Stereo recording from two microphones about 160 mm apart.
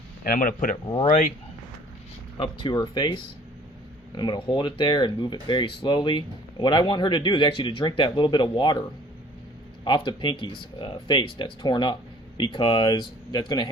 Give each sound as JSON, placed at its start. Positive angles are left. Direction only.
{"t": 0.3, "sound": "speech", "side_deg": 60}
{"t": 1.0, "sound": "speech", "side_deg": 50}
{"t": 2.4, "sound": "speech", "side_deg": 30}
{"t": 9.8, "sound": "speech", "side_deg": 30}